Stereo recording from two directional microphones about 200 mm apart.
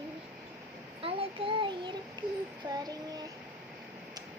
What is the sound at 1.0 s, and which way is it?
Child singing, 25° right (ahead or behind).